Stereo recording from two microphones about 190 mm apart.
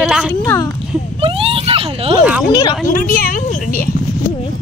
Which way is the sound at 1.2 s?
30° right (ahead or behind).